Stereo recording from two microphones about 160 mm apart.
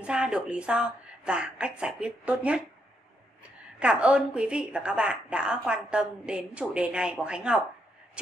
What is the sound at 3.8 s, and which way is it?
A woman's voice, 5° right (ahead or behind).